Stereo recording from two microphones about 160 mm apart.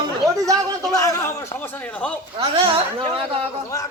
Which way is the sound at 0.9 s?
20° left (ahead or behind).